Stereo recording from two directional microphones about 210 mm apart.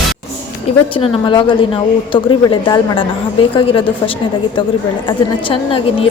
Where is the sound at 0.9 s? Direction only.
25° left (ahead or behind).